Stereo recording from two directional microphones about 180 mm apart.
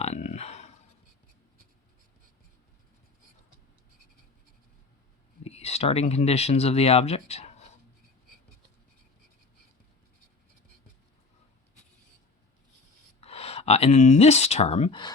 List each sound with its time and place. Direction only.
0.0 s a sound: 40° left (ahead or behind)
5.4 s speech: 35° left (ahead or behind)
13.2 s speech: 35° left (ahead or behind)